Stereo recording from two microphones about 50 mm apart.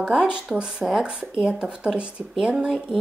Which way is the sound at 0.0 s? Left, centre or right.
Centre.